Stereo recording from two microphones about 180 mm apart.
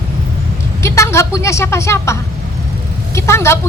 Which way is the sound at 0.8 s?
15° left (ahead or behind).